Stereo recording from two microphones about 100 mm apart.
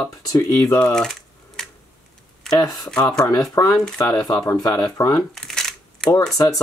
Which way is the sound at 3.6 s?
35° left (ahead or behind).